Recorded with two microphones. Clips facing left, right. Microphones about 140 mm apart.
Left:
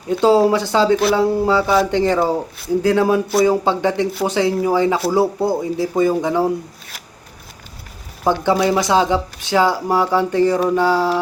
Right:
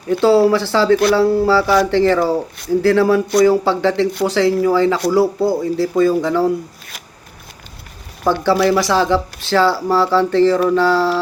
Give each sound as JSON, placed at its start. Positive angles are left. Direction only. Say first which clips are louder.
{"t": 0.1, "sound": "speech", "louder": "right 1 dB", "side_deg": 15}
{"t": 8.2, "sound": "speech", "louder": "right 2 dB", "side_deg": 20}